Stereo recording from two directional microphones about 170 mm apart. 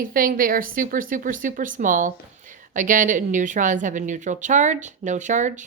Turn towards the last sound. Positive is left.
turn(degrees=-45)  # may be behind; listen again after turning